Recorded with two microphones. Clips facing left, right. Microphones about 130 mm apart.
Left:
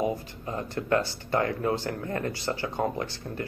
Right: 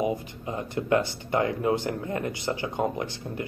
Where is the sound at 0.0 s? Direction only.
20° right (ahead or behind).